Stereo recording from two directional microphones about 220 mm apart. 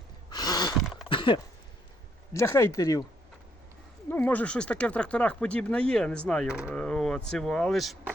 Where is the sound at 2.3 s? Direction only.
10° left (ahead or behind).